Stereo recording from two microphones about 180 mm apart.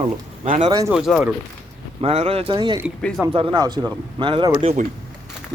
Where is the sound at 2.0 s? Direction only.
30° right (ahead or behind).